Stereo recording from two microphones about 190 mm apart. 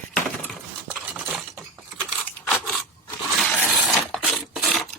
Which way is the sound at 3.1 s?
5° left (ahead or behind).